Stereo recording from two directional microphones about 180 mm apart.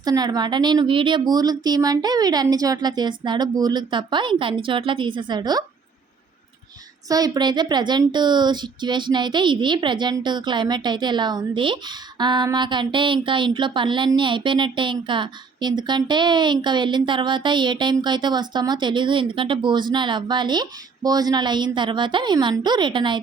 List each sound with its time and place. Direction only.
0.0 s a woman's voice: 20° right (ahead or behind)
7.1 s a woman's voice: 20° right (ahead or behind)